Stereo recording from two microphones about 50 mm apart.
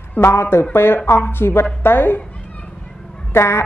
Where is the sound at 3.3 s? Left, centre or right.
Left.